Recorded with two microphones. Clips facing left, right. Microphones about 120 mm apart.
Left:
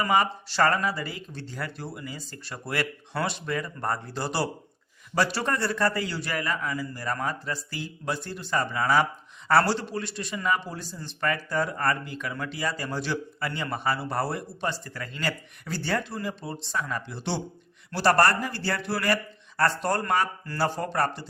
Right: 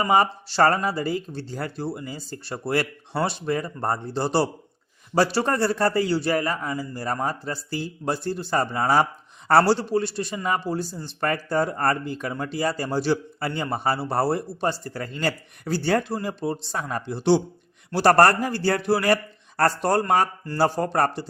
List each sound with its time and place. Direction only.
0.0 s a man's voice: 35° right (ahead or behind)